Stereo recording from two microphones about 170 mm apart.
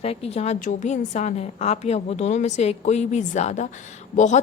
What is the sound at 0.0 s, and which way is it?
A woman's voice, 35° left (ahead or behind).